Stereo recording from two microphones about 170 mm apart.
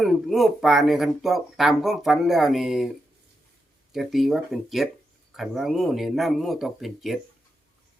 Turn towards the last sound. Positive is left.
turn(degrees=0)  # may be behind; listen again after turning